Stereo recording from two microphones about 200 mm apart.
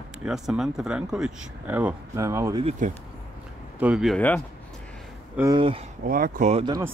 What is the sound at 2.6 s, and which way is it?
Speech, 30° right (ahead or behind).